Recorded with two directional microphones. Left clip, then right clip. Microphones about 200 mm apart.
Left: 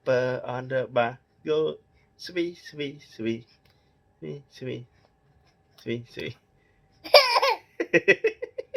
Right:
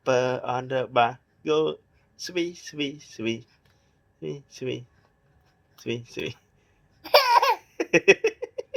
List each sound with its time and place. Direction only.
0.0 s speech: 25° right (ahead or behind)
5.8 s speech: 25° right (ahead or behind)
7.0 s laughter: 20° left (ahead or behind)
7.8 s a sound: 30° right (ahead or behind)